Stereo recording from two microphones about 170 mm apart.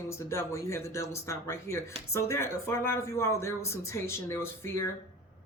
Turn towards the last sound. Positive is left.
turn(degrees=15)  # may be behind; listen again after turning